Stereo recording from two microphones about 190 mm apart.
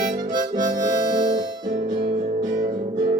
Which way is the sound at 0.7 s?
20° right (ahead or behind).